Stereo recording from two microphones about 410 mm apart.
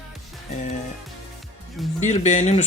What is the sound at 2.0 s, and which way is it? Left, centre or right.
Speech, centre.